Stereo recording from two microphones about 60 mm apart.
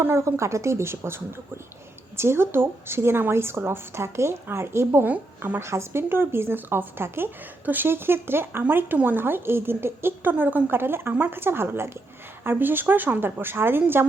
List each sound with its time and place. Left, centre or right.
0.0 s a woman's voice: right